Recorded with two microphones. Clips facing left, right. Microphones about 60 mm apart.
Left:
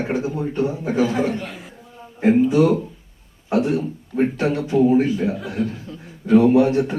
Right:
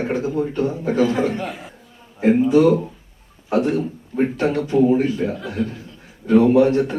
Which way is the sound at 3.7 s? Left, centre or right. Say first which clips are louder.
Even; centre.